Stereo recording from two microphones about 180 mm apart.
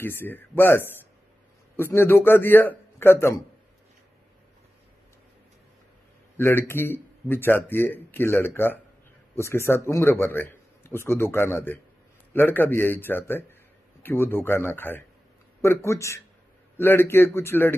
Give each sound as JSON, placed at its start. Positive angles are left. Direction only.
{"t": 0.0, "sound": "a man's voice", "side_deg": 10}
{"t": 6.3, "sound": "a man's voice", "side_deg": 15}